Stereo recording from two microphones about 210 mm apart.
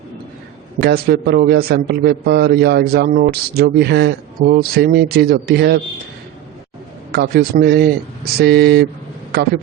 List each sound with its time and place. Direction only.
0.8 s a man's voice: 50° right (ahead or behind)
7.1 s a man's voice: 50° right (ahead or behind)